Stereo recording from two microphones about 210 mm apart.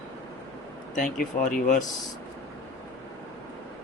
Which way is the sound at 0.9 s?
40° left (ahead or behind).